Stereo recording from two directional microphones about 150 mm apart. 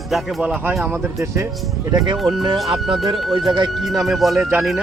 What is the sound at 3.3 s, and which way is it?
Speech, 30° right (ahead or behind).